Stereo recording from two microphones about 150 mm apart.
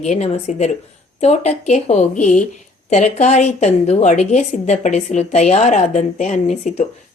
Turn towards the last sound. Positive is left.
turn(degrees=50)  # may be behind; listen again after turning